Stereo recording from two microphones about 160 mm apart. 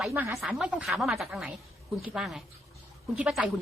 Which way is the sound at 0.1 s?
15° right (ahead or behind).